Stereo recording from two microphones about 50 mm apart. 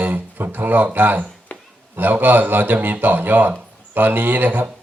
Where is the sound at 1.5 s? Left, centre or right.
Left.